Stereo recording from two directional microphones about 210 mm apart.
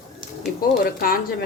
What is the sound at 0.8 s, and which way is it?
Speech, 45° left (ahead or behind).